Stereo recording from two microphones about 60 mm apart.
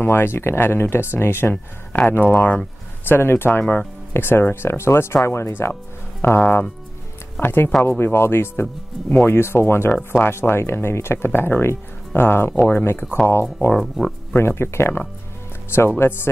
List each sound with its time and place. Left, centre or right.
0.0 s speech: left
1.5 s speech: left
2.0 s speech: left
13.7 s speech: centre
14.3 s speech: left